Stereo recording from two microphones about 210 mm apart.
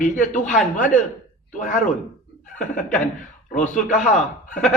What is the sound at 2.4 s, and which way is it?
Chuckle, 35° left (ahead or behind).